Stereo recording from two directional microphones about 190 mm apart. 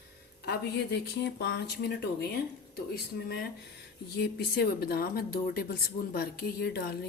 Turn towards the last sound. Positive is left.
turn(degrees=55)  # may be behind; listen again after turning